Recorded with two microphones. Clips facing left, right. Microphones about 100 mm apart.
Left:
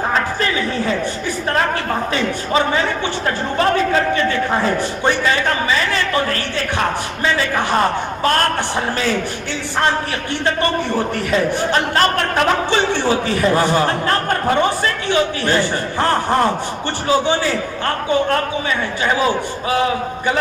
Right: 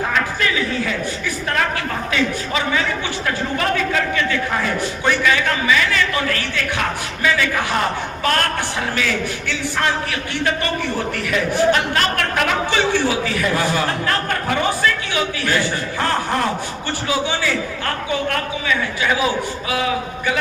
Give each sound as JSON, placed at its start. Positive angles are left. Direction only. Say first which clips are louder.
{"t": 0.1, "sound": "a sound", "louder": "left 2 dB", "side_deg": 35}
{"t": 2.1, "sound": "a man's voice", "louder": "left 2 dB", "side_deg": 35}
{"t": 11.3, "sound": "a man's voice", "louder": "right 3 dB", "side_deg": 35}